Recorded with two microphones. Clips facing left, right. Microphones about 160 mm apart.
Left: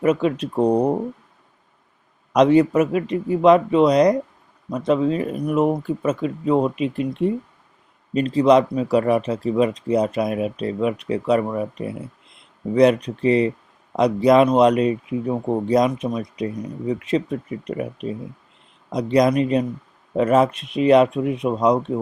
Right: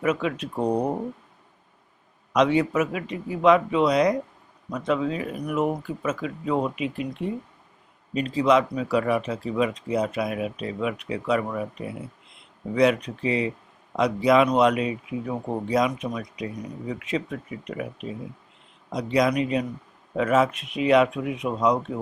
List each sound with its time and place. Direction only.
0.0 s speech: 35° left (ahead or behind)
2.3 s speech: 40° left (ahead or behind)